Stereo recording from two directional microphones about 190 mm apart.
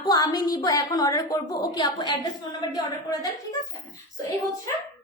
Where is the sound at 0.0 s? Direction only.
20° left (ahead or behind).